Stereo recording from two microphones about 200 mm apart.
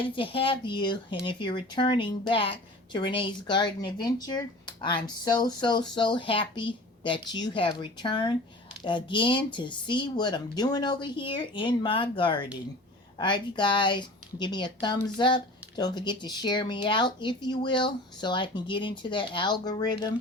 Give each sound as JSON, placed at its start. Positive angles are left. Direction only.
{"t": 0.2, "sound": "speech", "side_deg": 25}